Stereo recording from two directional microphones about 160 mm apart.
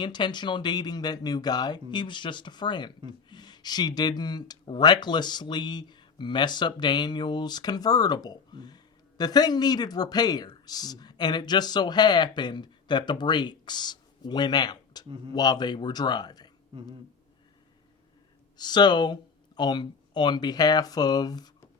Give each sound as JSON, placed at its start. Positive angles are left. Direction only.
{"t": 0.0, "sound": "speech", "side_deg": 30}
{"t": 18.5, "sound": "speech", "side_deg": 25}